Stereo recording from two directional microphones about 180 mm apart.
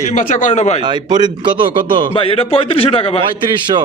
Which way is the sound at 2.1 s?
30° left (ahead or behind).